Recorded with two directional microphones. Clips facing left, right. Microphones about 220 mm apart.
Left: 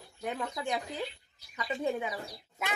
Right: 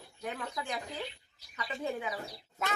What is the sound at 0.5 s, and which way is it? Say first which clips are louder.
Speech: left 4 dB; 20° left (ahead or behind).